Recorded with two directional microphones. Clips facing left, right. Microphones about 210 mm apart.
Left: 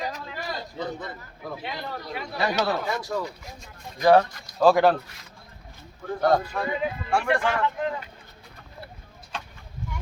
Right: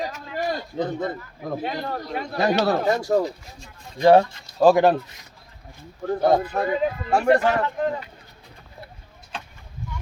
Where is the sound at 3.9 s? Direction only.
25° right (ahead or behind).